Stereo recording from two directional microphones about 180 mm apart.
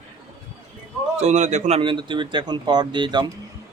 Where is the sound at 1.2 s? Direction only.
40° right (ahead or behind).